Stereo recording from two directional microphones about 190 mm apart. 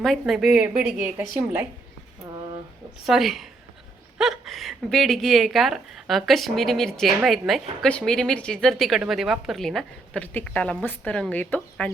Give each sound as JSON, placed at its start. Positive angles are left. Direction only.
{"t": 0.0, "sound": "a woman's voice", "side_deg": 0}
{"t": 3.1, "sound": "a woman's voice", "side_deg": 0}